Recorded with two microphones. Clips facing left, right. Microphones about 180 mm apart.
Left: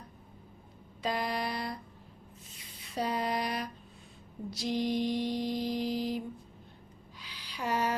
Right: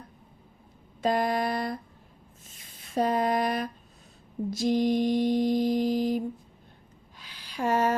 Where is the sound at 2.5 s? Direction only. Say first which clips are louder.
Right 8 dB; 50° right (ahead or behind).